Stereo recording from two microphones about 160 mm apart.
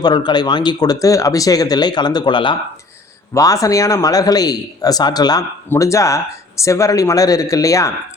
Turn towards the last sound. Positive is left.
turn(degrees=20)  # may be behind; listen again after turning